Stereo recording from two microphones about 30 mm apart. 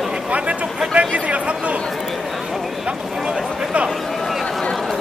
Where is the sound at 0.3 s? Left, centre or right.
Right.